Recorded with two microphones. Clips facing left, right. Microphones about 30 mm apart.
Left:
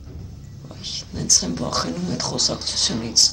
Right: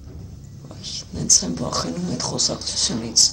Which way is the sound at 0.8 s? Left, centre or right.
Centre.